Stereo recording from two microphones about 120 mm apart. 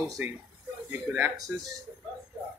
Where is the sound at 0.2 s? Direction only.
15° right (ahead or behind).